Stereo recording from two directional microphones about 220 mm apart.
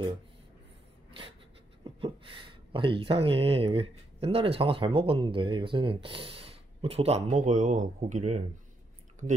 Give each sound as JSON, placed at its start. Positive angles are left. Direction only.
{"t": 2.0, "sound": "speech", "side_deg": -25}